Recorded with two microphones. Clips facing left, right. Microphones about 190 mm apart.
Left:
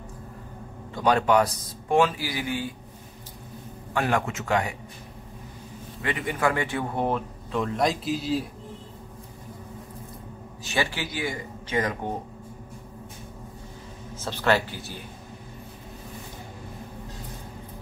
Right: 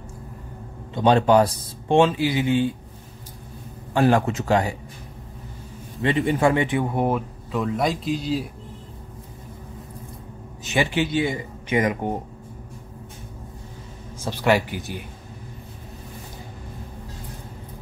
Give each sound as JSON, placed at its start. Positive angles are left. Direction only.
{"t": 0.9, "sound": "speech", "side_deg": -25}
{"t": 3.9, "sound": "speech", "side_deg": -35}
{"t": 6.0, "sound": "speech", "side_deg": -30}
{"t": 10.6, "sound": "speech", "side_deg": -20}
{"t": 14.1, "sound": "speech", "side_deg": -10}